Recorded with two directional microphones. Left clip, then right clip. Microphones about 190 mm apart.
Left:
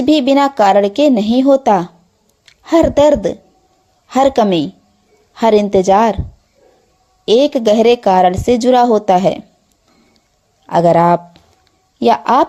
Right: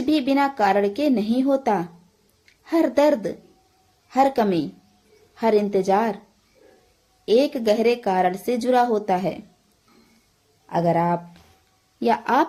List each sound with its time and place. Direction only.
0.0 s speech: 40° left (ahead or behind)
7.3 s speech: 40° left (ahead or behind)
10.7 s speech: 45° left (ahead or behind)